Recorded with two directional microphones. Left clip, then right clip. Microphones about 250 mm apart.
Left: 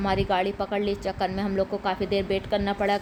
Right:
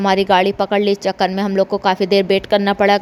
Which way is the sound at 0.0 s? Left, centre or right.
Right.